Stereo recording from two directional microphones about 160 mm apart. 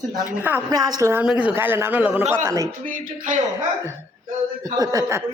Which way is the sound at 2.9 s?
55° right (ahead or behind).